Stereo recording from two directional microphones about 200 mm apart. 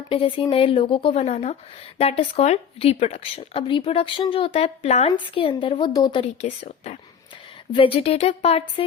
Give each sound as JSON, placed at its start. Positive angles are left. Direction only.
{"t": 0.1, "sound": "speech", "side_deg": 25}